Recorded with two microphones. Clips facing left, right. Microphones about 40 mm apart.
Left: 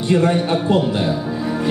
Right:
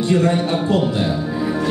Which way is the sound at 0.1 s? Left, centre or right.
Centre.